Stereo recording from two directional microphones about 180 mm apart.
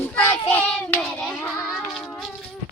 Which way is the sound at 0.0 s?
10° left (ahead or behind).